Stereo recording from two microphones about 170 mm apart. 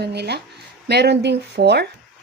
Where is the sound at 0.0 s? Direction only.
75° right (ahead or behind).